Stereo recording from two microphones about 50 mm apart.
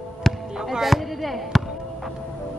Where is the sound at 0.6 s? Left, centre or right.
Centre.